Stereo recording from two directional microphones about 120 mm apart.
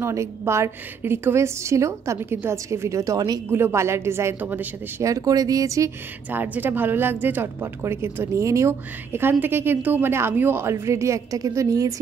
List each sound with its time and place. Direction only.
0.0 s a woman's voice: 25° right (ahead or behind)
5.0 s a woman's voice: 30° right (ahead or behind)
6.3 s a woman's voice: 15° right (ahead or behind)